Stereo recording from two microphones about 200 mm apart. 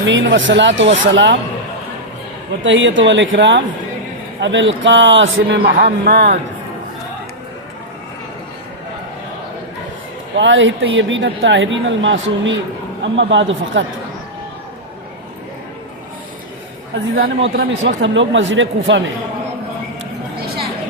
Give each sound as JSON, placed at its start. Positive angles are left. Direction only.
{"t": 0.0, "sound": "a man's voice", "side_deg": -65}
{"t": 2.6, "sound": "a woman's voice", "side_deg": -70}
{"t": 10.3, "sound": "a woman's voice", "side_deg": -65}
{"t": 16.9, "sound": "a woman's voice", "side_deg": -50}
{"t": 17.6, "sound": "a woman's voice", "side_deg": -65}